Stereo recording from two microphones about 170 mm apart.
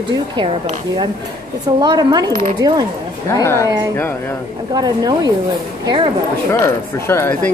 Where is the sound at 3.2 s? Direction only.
15° left (ahead or behind).